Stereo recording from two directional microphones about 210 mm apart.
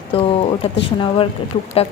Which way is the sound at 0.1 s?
25° left (ahead or behind).